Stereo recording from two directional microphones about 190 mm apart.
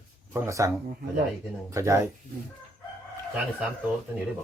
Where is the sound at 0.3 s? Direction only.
15° right (ahead or behind).